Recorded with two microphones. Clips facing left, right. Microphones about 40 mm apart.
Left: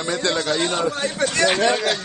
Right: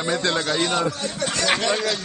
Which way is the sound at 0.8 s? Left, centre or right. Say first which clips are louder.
Left 3 dB; left.